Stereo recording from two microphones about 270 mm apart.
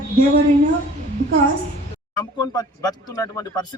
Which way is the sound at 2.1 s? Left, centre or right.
Centre.